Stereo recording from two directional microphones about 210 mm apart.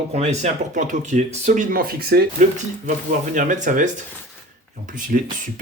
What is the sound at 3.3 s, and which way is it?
Speech, 35° right (ahead or behind).